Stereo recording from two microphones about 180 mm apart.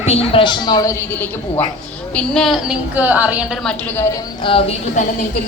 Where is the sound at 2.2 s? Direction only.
Centre (ahead or behind).